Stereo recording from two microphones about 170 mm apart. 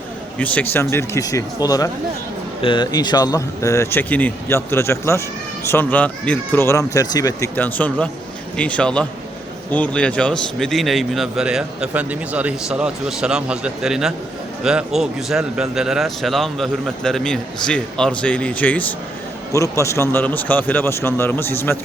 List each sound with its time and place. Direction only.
0.3 s a man's voice: 10° left (ahead or behind)